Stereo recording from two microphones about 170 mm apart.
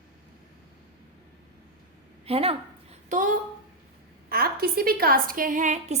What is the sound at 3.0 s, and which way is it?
Speech, 45° right (ahead or behind).